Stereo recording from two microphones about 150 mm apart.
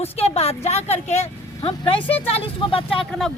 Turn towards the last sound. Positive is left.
turn(degrees=35)  # may be behind; listen again after turning